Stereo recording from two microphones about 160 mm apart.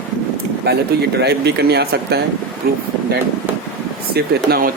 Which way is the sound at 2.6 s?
70° right (ahead or behind).